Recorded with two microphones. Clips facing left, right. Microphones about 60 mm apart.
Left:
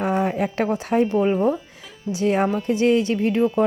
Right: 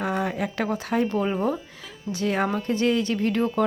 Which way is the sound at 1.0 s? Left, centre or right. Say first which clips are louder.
Left 7 dB; centre.